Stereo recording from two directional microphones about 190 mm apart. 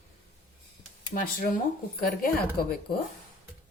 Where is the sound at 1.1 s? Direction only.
45° left (ahead or behind).